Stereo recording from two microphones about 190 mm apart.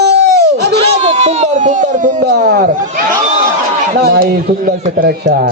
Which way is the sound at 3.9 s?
55° right (ahead or behind).